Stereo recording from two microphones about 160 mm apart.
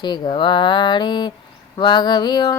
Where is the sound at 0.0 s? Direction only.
30° left (ahead or behind).